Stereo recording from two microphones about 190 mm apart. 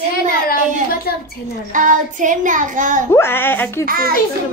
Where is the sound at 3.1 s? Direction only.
10° left (ahead or behind).